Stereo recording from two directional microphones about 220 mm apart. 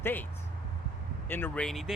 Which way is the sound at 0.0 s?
10° left (ahead or behind).